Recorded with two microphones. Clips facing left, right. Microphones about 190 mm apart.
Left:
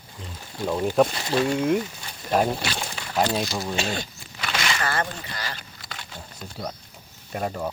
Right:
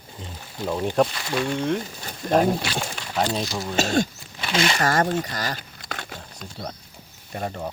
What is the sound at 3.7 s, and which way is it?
Speech, 45° right (ahead or behind).